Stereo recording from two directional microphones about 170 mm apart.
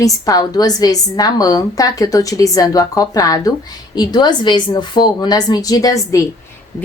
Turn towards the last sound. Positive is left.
turn(degrees=20)  # may be behind; listen again after turning